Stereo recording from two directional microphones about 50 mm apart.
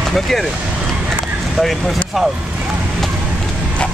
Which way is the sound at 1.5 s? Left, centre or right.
Centre.